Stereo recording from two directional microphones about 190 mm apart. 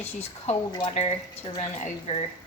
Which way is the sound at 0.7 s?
25° left (ahead or behind).